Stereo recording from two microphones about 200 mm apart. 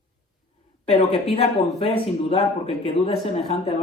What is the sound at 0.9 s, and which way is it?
Speech, 30° left (ahead or behind).